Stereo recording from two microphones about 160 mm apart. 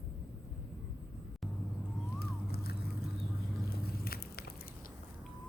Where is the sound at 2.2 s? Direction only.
75° left (ahead or behind).